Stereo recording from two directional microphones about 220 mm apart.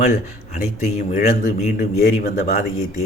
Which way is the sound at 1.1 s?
30° left (ahead or behind).